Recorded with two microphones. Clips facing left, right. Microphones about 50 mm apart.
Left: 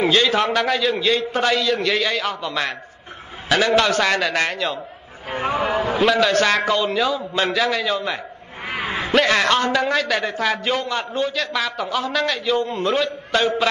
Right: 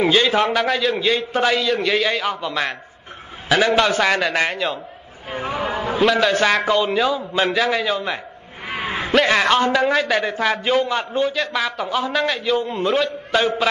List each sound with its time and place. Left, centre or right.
0.0 s a man's voice: centre
5.3 s a sound: left
5.9 s a man's voice: centre